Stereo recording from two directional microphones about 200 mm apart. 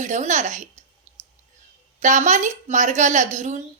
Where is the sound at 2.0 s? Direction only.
35° right (ahead or behind).